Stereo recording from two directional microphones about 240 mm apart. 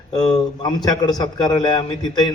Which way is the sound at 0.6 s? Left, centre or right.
Centre.